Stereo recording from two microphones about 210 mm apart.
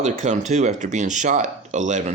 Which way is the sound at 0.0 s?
35° right (ahead or behind).